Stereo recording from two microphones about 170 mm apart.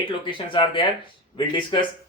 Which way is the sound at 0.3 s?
30° left (ahead or behind).